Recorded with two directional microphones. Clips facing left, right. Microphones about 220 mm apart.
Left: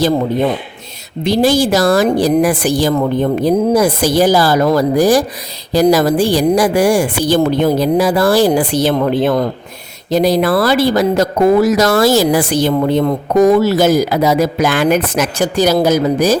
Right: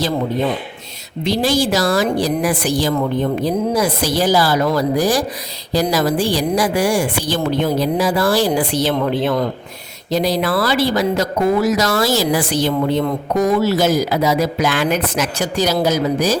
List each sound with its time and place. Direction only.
1.2 s a woman's voice: 50° left (ahead or behind)